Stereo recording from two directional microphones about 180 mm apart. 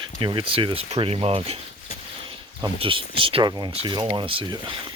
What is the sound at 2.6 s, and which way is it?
Speech, 30° right (ahead or behind).